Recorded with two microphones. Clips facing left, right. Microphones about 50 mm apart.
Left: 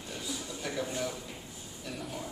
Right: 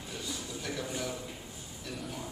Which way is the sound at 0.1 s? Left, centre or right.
Centre.